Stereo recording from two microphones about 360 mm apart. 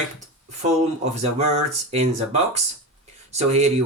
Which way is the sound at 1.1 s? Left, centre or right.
Centre.